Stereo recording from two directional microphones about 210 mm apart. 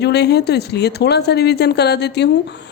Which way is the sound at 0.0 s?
50° left (ahead or behind).